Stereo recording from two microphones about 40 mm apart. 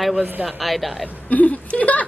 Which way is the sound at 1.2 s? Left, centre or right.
Left.